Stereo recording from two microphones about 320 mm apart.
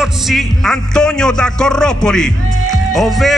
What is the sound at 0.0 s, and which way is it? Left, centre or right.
Speech, centre.